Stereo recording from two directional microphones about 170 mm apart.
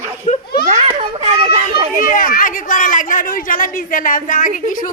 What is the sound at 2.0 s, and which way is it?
Speech, 55° left (ahead or behind).